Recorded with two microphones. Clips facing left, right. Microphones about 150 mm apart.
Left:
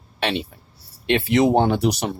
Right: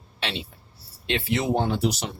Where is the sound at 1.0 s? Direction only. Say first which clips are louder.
Left 8 dB; 70° left (ahead or behind).